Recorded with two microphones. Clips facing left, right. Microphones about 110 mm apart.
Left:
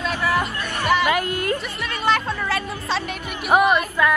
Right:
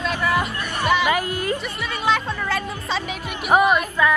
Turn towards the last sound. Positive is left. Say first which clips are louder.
# even
turn(degrees=0)  # may be behind; listen again after turning